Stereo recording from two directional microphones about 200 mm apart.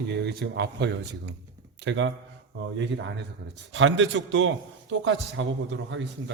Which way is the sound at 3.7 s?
70° right (ahead or behind).